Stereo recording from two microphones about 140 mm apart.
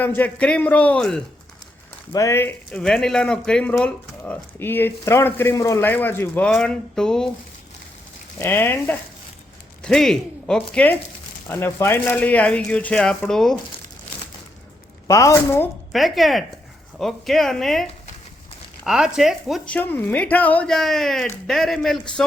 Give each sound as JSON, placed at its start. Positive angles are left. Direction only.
{"t": 0.2, "sound": "speech", "side_deg": 10}
{"t": 2.1, "sound": "speech", "side_deg": 20}
{"t": 2.7, "sound": "speech", "side_deg": 5}
{"t": 8.4, "sound": "speech", "side_deg": 15}
{"t": 9.8, "sound": "speech", "side_deg": 5}
{"t": 15.0, "sound": "a woman's voice", "side_deg": 20}
{"t": 15.9, "sound": "speech", "side_deg": 0}
{"t": 18.9, "sound": "speech", "side_deg": -5}
{"t": 19.6, "sound": "speech", "side_deg": 10}